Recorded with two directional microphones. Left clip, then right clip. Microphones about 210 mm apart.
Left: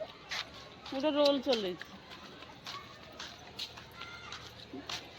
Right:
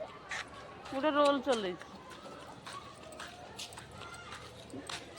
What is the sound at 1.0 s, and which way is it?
Speech, 20° left (ahead or behind).